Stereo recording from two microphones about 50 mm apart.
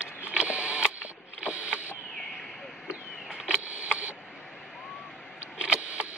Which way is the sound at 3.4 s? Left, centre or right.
Right.